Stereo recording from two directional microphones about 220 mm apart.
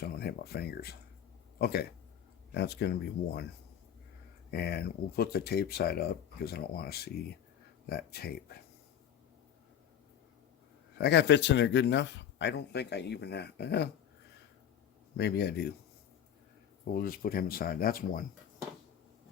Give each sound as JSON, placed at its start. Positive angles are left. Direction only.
{"t": 0.0, "sound": "speech", "side_deg": 45}
{"t": 4.5, "sound": "speech", "side_deg": 45}
{"t": 10.9, "sound": "speech", "side_deg": 50}
{"t": 15.2, "sound": "speech", "side_deg": 45}
{"t": 16.8, "sound": "speech", "side_deg": 40}